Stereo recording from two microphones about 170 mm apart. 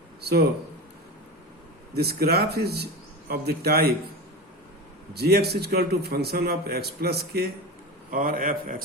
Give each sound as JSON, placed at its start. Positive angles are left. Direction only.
{"t": 0.2, "sound": "speech", "side_deg": -70}
{"t": 1.9, "sound": "speech", "side_deg": -70}
{"t": 5.1, "sound": "a man's voice", "side_deg": -70}
{"t": 8.1, "sound": "a man's voice", "side_deg": -55}